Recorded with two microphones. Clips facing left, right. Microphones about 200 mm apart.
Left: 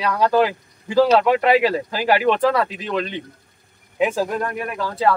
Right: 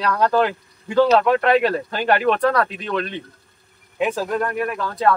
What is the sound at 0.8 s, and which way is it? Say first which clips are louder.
Speech: even; 30° left (ahead or behind).